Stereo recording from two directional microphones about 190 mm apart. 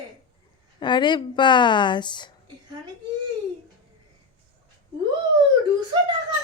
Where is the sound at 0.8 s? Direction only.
25° left (ahead or behind).